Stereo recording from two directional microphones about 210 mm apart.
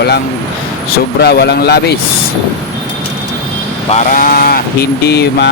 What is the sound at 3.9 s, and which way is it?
Speech, 40° left (ahead or behind).